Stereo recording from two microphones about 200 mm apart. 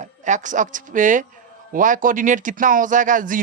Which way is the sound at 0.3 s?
40° right (ahead or behind).